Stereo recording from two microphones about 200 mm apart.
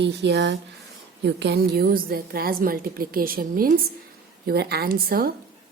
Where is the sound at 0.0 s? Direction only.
60° right (ahead or behind).